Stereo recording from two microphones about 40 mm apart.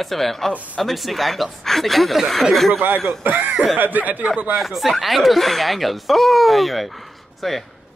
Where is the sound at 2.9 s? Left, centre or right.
Right.